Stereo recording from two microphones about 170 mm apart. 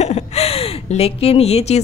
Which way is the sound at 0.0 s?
40° left (ahead or behind).